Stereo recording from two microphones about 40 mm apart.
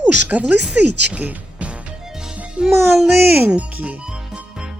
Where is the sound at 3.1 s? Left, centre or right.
Right.